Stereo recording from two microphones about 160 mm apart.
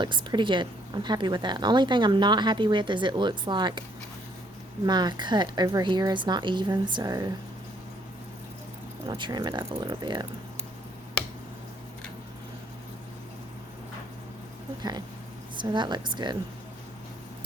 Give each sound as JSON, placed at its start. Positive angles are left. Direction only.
{"t": 0.0, "sound": "a woman's voice", "side_deg": -30}
{"t": 4.9, "sound": "a woman's voice", "side_deg": -25}
{"t": 9.0, "sound": "a woman's voice", "side_deg": -30}
{"t": 14.8, "sound": "a woman's voice", "side_deg": -25}